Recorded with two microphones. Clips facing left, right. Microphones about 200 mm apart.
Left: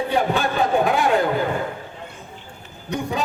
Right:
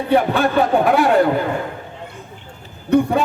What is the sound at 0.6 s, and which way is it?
Speech, 60° right (ahead or behind).